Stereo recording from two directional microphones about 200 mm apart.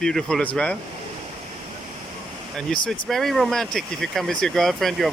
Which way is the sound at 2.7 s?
5° left (ahead or behind).